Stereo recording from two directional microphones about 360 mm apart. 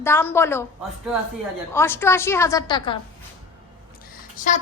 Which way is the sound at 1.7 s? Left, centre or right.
Centre.